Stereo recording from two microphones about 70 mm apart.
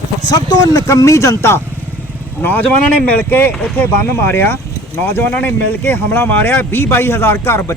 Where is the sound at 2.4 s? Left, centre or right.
Left.